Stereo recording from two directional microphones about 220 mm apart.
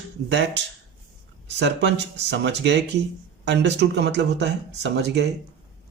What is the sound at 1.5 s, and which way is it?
Speech, 55° right (ahead or behind).